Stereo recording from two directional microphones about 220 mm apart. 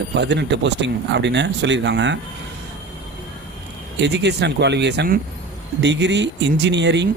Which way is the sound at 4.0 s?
50° right (ahead or behind).